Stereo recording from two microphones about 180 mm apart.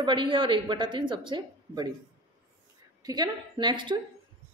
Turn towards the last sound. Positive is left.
turn(degrees=-25)  # may be behind; listen again after turning